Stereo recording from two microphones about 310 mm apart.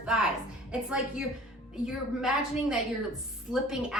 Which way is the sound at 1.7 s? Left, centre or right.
Centre.